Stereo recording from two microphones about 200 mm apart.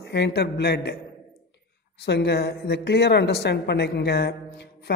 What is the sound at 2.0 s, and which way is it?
A woman's voice, 55° left (ahead or behind).